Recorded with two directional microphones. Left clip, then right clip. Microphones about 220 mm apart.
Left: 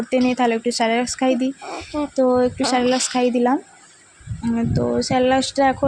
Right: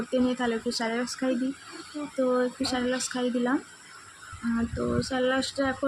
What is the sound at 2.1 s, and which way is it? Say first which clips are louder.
Speech: left 8 dB; 30° left (ahead or behind).